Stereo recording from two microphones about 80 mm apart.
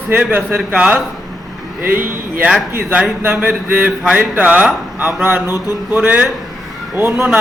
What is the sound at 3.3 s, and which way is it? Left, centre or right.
A man's voice, right.